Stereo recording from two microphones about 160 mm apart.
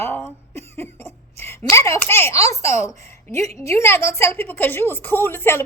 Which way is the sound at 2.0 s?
15° left (ahead or behind).